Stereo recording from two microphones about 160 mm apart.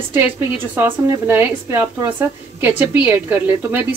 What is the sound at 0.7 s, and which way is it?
Speech, 15° right (ahead or behind).